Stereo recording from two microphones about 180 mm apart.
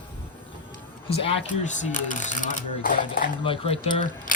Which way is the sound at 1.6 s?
45° left (ahead or behind).